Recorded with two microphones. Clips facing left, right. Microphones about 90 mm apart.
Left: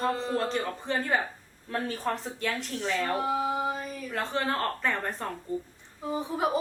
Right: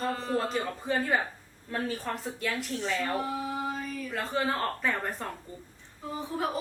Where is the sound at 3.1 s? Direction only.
20° left (ahead or behind).